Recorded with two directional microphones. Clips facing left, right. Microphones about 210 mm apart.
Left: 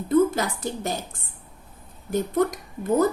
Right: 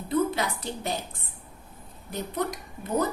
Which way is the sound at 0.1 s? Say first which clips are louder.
Left 6 dB; 45° left (ahead or behind).